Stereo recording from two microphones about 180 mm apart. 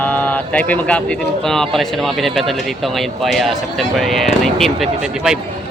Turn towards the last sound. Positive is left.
turn(degrees=-5)  # may be behind; listen again after turning